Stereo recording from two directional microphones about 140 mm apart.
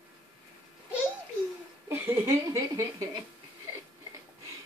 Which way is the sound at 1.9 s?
15° right (ahead or behind).